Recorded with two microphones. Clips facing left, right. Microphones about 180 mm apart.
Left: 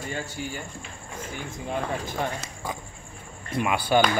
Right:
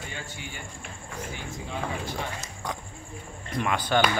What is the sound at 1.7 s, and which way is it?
Speech, 55° left (ahead or behind).